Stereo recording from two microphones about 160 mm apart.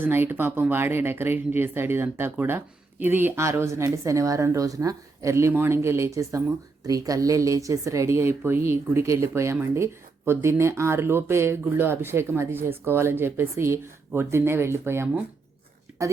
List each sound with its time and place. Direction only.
0.0 s a woman's voice: 15° right (ahead or behind)